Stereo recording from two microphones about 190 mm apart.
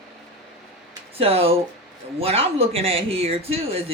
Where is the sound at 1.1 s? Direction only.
30° right (ahead or behind).